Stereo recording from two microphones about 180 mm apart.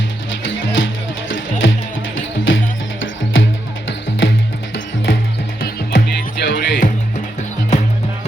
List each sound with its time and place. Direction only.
0.4 s music: 90° left
5.5 s music: 60° left (ahead or behind)